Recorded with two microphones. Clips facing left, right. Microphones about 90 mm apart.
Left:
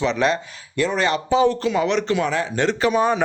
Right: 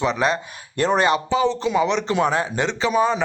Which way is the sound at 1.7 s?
Centre (ahead or behind).